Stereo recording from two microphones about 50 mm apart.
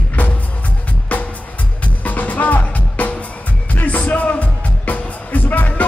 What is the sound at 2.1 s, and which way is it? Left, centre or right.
Music, left.